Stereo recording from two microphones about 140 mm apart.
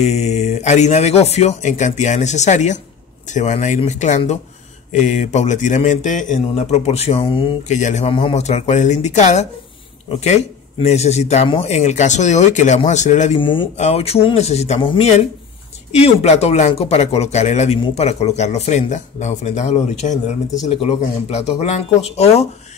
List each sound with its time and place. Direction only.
0.0 s a man's voice: 50° left (ahead or behind)
7.6 s a man's voice: 55° left (ahead or behind)
8.1 s a man's voice: 40° left (ahead or behind); by 13.4 s 60° left (ahead or behind)
13.4 s speech: 35° left (ahead or behind)
13.7 s speech: 50° left (ahead or behind)